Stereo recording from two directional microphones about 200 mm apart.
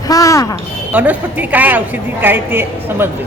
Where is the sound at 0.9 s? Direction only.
10° right (ahead or behind).